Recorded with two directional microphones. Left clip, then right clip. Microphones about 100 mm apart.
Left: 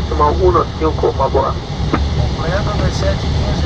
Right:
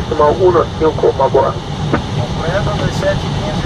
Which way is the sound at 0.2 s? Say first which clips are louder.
Right 2 dB; 20° right (ahead or behind).